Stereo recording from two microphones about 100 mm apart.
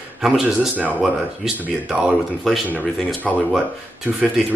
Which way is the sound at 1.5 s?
15° right (ahead or behind).